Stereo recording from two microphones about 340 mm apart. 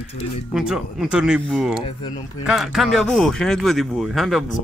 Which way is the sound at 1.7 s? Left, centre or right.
Centre.